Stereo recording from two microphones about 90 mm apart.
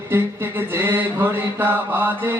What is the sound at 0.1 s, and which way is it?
Mantra, 25° right (ahead or behind).